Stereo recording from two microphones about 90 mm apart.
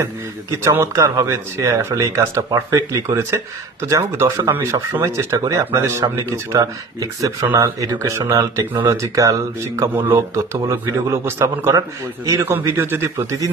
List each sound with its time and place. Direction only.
0.6 s a man's voice: 30° right (ahead or behind)